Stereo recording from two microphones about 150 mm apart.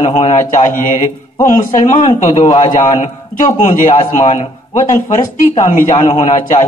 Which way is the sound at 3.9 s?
45° left (ahead or behind).